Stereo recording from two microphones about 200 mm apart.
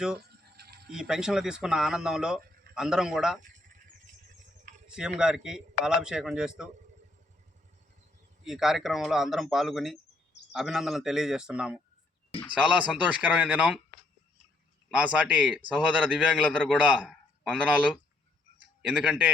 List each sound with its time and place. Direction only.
0.5 s a sound: 50° right (ahead or behind)
0.9 s speech: 5° right (ahead or behind)
4.9 s speech: 5° right (ahead or behind)
8.4 s a man's voice: centre (ahead or behind)
14.8 s a man's voice: 5° right (ahead or behind)